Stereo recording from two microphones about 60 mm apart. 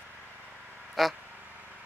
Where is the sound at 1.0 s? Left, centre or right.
Centre.